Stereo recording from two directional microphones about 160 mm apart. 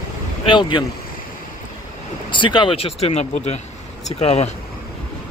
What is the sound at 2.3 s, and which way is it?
Speech, 30° left (ahead or behind).